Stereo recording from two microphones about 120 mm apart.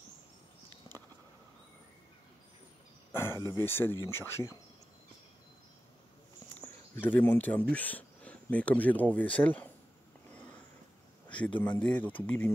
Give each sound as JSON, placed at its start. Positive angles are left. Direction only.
{"t": 3.1, "sound": "cricket", "side_deg": 20}
{"t": 3.5, "sound": "speech", "side_deg": 20}
{"t": 6.6, "sound": "speech", "side_deg": 15}
{"t": 10.3, "sound": "sniff", "side_deg": 10}
{"t": 11.2, "sound": "speech", "side_deg": 10}